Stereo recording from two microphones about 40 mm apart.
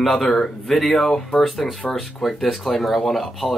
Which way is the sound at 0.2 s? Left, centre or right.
Centre.